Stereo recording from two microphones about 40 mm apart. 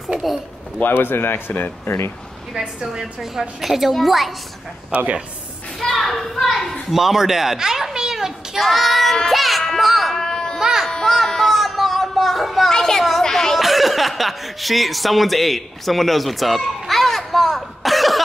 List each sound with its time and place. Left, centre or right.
0.8 s speech: left
2.9 s a woman's voice: centre
4.9 s speech: right
5.8 s a child's voice: centre
6.9 s a child's voice: centre
8.6 s child singing: centre
9.3 s music: centre
10.1 s a sound: centre
10.6 s music: centre
11.1 s music: centre
12.7 s a sound: centre
13.6 s speech: centre